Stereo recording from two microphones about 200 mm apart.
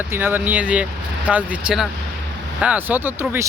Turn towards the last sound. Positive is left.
turn(degrees=-10)  # may be behind; listen again after turning